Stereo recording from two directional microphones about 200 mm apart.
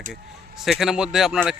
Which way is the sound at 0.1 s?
Centre (ahead or behind).